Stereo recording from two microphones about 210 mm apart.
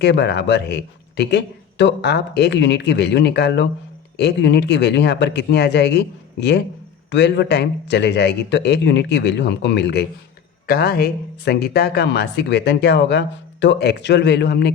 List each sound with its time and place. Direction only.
0.0 s speech: 55° left (ahead or behind)